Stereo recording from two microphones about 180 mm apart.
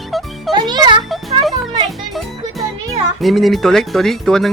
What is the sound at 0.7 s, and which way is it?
Music, 25° right (ahead or behind).